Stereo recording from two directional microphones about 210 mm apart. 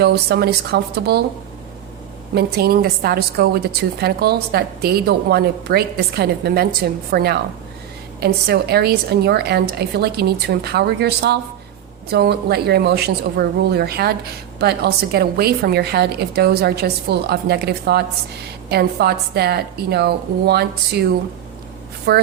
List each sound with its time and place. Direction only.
0.0 s a woman's voice: 50° right (ahead or behind)
2.3 s a woman's voice: 45° right (ahead or behind)
22.1 s a woman's voice: 50° right (ahead or behind)